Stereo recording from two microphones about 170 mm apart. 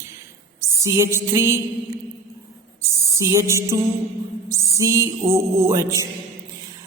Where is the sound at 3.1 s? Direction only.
20° right (ahead or behind).